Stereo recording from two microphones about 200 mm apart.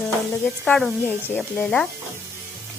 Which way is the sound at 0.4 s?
5° left (ahead or behind).